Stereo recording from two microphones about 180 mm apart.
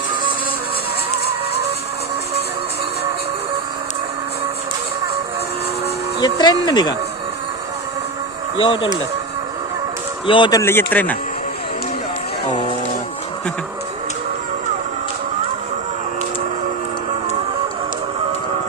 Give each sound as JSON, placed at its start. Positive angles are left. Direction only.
{"t": 6.1, "sound": "speech", "side_deg": 25}
{"t": 8.5, "sound": "speech", "side_deg": 30}
{"t": 10.2, "sound": "speech", "side_deg": 25}
{"t": 10.6, "sound": "speech", "side_deg": 10}